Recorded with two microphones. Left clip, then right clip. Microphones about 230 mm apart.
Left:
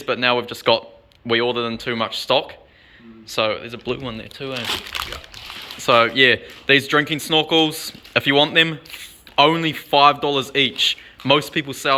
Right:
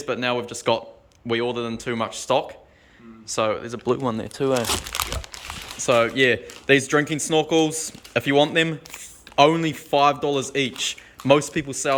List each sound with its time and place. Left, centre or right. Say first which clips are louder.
0.0 s speech: left 5 dB; centre; by 4.6 s right
5.8 s speech: left 4 dB; centre